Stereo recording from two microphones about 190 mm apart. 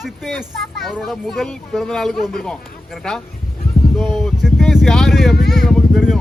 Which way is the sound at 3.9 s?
Centre (ahead or behind).